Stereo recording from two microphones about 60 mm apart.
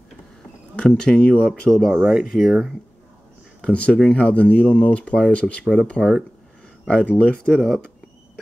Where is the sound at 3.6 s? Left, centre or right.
Centre.